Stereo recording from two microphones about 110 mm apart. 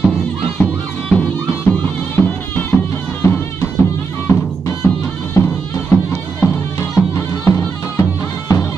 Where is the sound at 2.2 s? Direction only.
15° left (ahead or behind).